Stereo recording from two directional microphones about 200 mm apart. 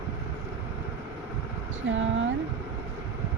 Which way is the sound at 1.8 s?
65° right (ahead or behind).